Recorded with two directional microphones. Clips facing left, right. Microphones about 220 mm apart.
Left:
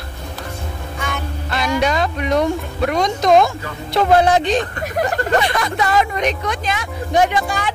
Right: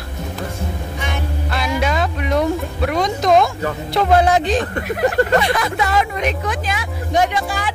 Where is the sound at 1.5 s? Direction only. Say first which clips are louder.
Left 2 dB; 5° right (ahead or behind).